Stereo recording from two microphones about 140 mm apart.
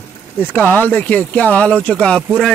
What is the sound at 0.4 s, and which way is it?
A man's voice, 15° left (ahead or behind).